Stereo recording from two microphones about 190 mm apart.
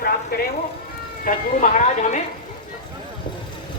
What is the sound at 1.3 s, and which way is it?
Speech, 50° left (ahead or behind).